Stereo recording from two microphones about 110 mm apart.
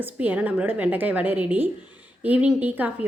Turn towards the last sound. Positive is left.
turn(degrees=-15)  # may be behind; listen again after turning